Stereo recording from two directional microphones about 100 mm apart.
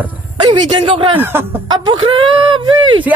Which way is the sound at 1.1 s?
20° right (ahead or behind).